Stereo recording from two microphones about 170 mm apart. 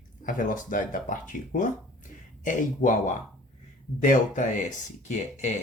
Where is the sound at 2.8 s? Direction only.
50° left (ahead or behind).